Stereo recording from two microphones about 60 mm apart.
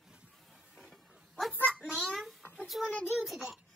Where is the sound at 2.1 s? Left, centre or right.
Centre.